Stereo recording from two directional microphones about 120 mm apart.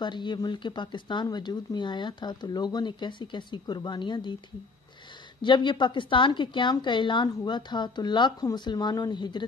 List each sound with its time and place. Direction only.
0.0 s speech: 40° left (ahead or behind)
5.4 s speech: 40° left (ahead or behind)